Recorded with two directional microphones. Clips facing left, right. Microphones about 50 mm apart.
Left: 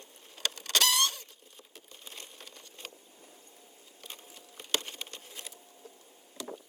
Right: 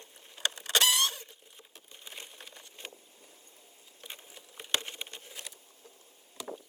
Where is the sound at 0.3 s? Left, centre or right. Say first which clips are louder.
Right 2 dB; right.